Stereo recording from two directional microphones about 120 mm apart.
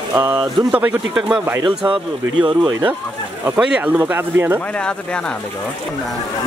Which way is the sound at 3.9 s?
15° right (ahead or behind).